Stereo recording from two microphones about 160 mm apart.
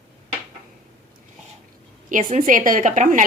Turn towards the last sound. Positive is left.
turn(degrees=-50)  # may be behind; listen again after turning